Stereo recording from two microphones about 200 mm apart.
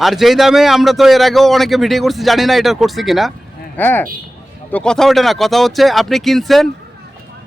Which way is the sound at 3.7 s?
10° left (ahead or behind).